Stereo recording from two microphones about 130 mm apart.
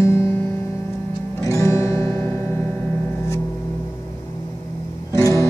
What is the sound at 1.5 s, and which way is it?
Music, 20° left (ahead or behind).